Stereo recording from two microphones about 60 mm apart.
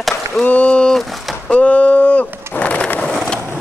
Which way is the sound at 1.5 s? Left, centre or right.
Left.